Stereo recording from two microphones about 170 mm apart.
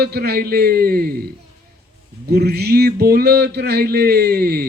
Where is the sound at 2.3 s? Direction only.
70° right (ahead or behind).